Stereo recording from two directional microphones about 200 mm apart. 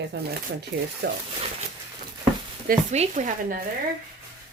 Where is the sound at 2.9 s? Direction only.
35° right (ahead or behind).